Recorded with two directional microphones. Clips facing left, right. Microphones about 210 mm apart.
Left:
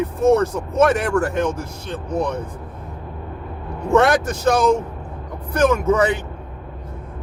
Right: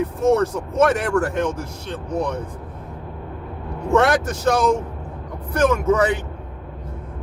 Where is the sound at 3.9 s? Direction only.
15° left (ahead or behind).